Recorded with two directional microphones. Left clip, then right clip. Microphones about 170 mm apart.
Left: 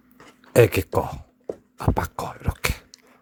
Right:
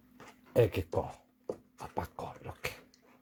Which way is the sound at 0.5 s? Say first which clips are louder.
Left 11 dB; 40° left (ahead or behind).